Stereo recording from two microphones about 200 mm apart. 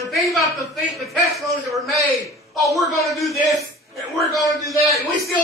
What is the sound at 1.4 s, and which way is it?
Speech, 15° right (ahead or behind).